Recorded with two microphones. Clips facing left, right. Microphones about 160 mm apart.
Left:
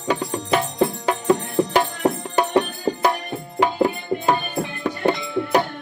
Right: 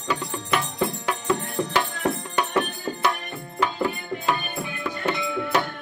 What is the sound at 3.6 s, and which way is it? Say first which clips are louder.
Music: left 6 dB; 40° left (ahead or behind).